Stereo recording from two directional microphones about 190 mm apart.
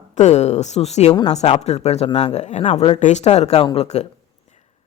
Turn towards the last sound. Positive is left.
turn(degrees=35)  # may be behind; listen again after turning